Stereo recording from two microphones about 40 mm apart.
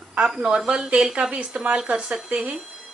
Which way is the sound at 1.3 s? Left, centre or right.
Right.